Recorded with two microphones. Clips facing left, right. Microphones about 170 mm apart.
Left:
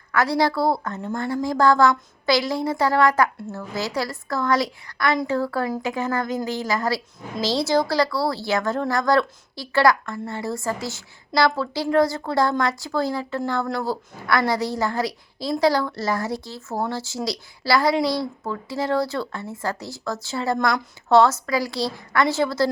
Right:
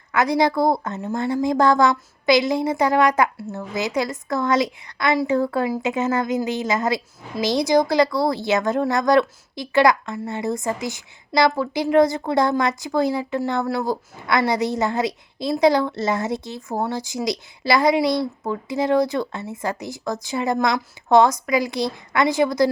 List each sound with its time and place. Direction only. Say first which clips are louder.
0.1 s a woman's voice: right 2 dB; 20° right (ahead or behind)